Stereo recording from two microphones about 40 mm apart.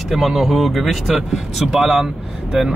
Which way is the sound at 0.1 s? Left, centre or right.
Centre.